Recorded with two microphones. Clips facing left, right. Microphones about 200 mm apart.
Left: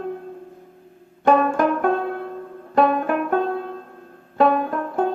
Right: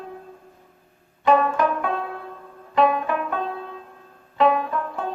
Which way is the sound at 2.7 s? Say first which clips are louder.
Left 2 dB; 50° left (ahead or behind).